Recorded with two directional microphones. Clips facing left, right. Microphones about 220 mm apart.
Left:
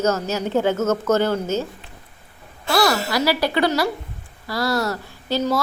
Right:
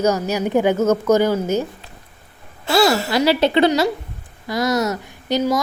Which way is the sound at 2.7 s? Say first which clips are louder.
Right 3 dB; 25° right (ahead or behind).